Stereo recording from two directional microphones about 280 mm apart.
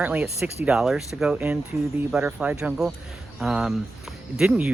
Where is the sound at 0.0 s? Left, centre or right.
Centre.